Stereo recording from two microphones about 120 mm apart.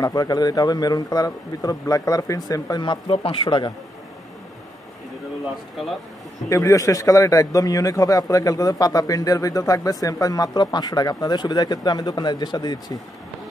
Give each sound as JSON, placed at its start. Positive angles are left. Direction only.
{"t": 0.0, "sound": "a man's voice", "side_deg": 30}
{"t": 6.5, "sound": "a man's voice", "side_deg": 30}